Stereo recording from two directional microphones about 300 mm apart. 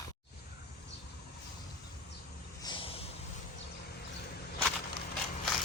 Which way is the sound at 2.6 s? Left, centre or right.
Centre.